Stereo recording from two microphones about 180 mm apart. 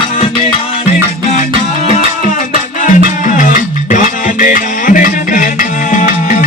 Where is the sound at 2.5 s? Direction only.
45° left (ahead or behind).